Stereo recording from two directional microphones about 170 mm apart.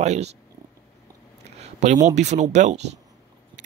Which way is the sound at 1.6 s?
40° right (ahead or behind).